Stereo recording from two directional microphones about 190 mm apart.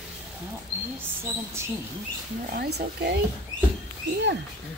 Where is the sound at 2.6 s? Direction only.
60° right (ahead or behind).